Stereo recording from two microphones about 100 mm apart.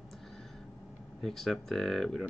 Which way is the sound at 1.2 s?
Centre (ahead or behind).